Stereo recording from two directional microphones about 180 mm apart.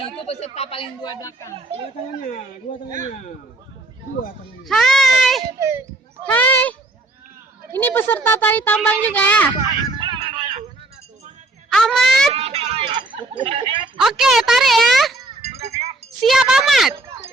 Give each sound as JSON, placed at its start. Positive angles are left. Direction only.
{"t": 0.0, "sound": "speech", "side_deg": 35}
{"t": 4.7, "sound": "a woman's voice", "side_deg": 0}
{"t": 5.5, "sound": "speech", "side_deg": -15}
{"t": 6.2, "sound": "speech", "side_deg": 10}
{"t": 10.0, "sound": "music", "side_deg": -25}
{"t": 11.7, "sound": "a woman's voice", "side_deg": 0}
{"t": 12.3, "sound": "speech", "side_deg": -35}
{"t": 14.0, "sound": "a woman's voice", "side_deg": -5}
{"t": 15.6, "sound": "speech", "side_deg": -35}
{"t": 16.2, "sound": "a woman's voice", "side_deg": 0}